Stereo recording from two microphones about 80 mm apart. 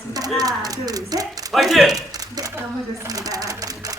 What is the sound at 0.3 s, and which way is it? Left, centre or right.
Speech, right.